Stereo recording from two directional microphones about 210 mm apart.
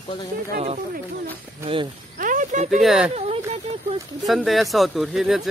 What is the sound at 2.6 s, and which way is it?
Speech, centre (ahead or behind).